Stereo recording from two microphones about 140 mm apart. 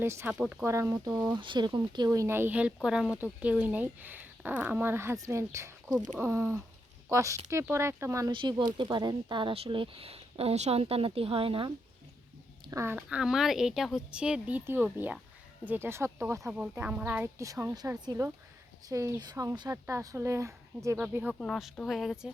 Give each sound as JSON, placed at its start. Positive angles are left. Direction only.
{"t": 0.0, "sound": "speech", "side_deg": -15}
{"t": 0.6, "sound": "speech", "side_deg": -20}
{"t": 8.3, "sound": "speech", "side_deg": -35}
{"t": 12.6, "sound": "speech", "side_deg": -20}
{"t": 13.0, "sound": "speech", "side_deg": -5}
{"t": 17.3, "sound": "speech", "side_deg": -20}
{"t": 21.3, "sound": "speech", "side_deg": 0}